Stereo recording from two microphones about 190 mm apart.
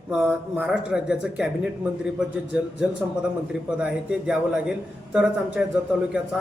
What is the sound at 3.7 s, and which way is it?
A man's voice, 5° right (ahead or behind).